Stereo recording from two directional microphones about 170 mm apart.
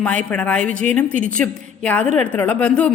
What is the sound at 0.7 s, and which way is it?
Speech, 45° right (ahead or behind).